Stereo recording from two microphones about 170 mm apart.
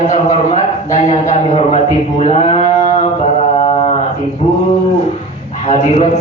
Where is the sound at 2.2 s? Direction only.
40° left (ahead or behind).